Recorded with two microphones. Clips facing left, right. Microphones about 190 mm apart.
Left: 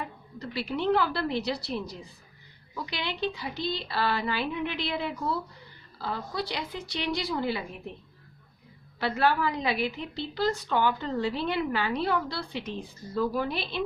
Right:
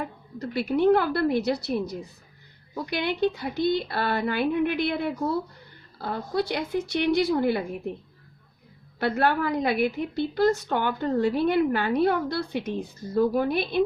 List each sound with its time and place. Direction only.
0.0 s a woman's voice: 50° right (ahead or behind)
9.0 s a woman's voice: 55° right (ahead or behind)